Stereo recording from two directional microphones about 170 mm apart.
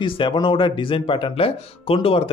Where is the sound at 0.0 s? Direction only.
30° left (ahead or behind).